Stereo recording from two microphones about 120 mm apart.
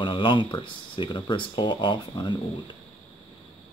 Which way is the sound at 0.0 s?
45° left (ahead or behind).